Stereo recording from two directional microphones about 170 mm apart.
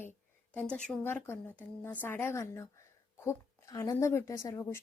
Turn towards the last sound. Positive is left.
turn(degrees=20)  # may be behind; listen again after turning